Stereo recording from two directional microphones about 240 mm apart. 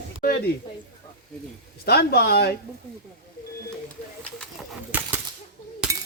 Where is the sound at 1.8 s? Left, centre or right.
Left.